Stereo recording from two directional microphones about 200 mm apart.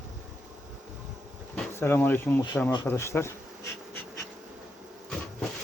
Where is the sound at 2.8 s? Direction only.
15° left (ahead or behind).